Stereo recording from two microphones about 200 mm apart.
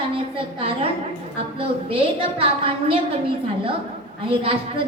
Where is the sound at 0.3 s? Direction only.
30° right (ahead or behind).